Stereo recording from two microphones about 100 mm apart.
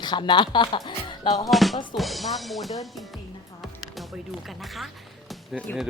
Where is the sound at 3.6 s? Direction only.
Centre (ahead or behind).